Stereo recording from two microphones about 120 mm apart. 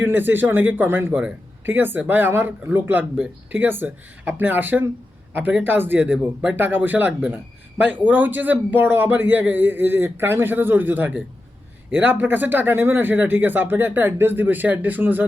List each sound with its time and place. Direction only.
0.0 s speech: 15° right (ahead or behind)